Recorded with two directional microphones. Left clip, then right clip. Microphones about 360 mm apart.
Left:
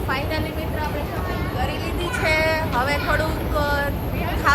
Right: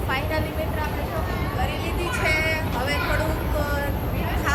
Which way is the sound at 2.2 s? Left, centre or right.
Centre.